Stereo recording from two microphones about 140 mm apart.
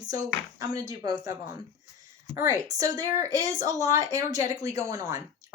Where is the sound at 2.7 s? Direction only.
25° right (ahead or behind).